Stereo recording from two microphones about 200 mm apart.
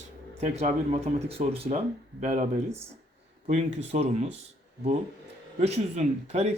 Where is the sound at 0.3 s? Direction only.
35° right (ahead or behind).